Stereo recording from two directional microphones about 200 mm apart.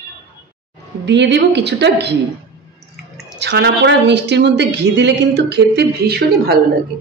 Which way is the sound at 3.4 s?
60° right (ahead or behind).